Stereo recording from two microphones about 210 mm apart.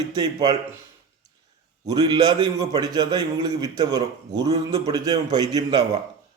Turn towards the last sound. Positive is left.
turn(degrees=-20)  # may be behind; listen again after turning